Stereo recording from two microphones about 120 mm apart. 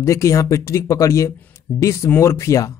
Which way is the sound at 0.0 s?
25° left (ahead or behind).